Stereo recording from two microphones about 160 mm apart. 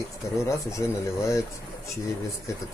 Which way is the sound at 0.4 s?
20° left (ahead or behind).